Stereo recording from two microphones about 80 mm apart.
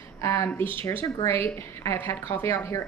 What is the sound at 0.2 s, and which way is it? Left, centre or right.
A woman's voice, left.